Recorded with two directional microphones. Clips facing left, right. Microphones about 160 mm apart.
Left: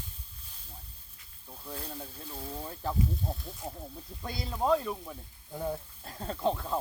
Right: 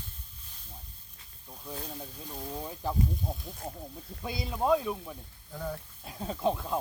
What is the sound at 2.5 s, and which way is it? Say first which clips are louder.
Speech: right 1 dB; 10° right (ahead or behind).